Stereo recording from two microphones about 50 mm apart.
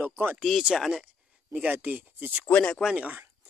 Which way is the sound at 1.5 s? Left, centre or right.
Right.